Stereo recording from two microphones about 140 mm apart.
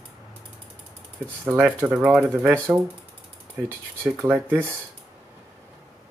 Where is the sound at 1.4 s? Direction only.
10° right (ahead or behind).